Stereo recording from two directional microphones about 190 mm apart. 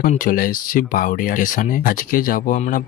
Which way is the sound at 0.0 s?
45° left (ahead or behind).